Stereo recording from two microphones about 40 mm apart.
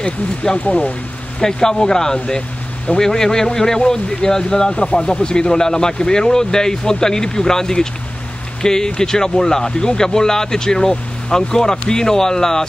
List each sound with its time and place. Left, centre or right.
0.0 s speech: left
1.4 s speech: centre